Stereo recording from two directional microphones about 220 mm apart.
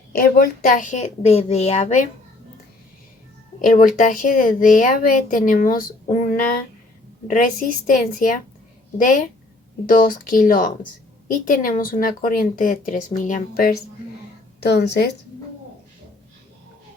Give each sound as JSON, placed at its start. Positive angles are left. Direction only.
{"t": 0.2, "sound": "speech", "side_deg": 40}
{"t": 3.6, "sound": "speech", "side_deg": 40}
{"t": 9.8, "sound": "a woman's voice", "side_deg": 40}